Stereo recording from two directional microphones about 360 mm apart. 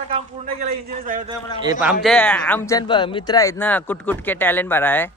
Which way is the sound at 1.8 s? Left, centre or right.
Centre.